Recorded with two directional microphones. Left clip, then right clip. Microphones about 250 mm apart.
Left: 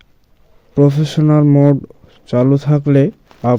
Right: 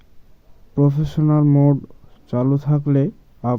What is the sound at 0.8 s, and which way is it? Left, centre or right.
Speech, left.